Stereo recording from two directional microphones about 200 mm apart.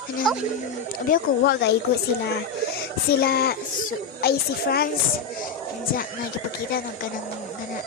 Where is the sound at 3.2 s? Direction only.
50° left (ahead or behind).